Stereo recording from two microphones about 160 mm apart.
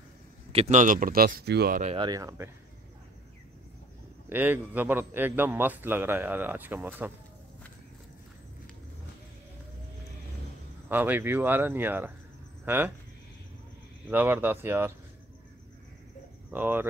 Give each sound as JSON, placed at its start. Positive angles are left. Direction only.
{"t": 0.5, "sound": "speech", "side_deg": -40}
{"t": 2.0, "sound": "speech", "side_deg": -25}
{"t": 4.3, "sound": "a man's voice", "side_deg": -10}
{"t": 10.9, "sound": "a man's voice", "side_deg": -10}
{"t": 14.0, "sound": "a man's voice", "side_deg": -10}
{"t": 16.4, "sound": "speech", "side_deg": -10}